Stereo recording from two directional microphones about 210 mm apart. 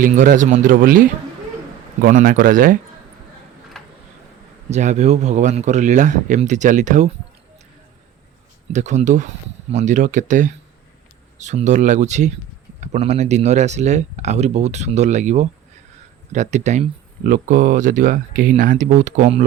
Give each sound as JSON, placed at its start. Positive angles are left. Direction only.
{"t": 0.0, "sound": "speech", "side_deg": -40}
{"t": 4.7, "sound": "speech", "side_deg": -35}
{"t": 8.7, "sound": "speech", "side_deg": -35}